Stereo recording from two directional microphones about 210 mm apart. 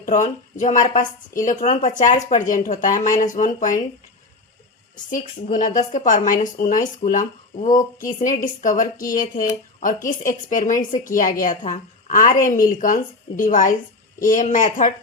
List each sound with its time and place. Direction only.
0.0 s a woman's voice: 35° left (ahead or behind)
5.1 s a woman's voice: 40° left (ahead or behind)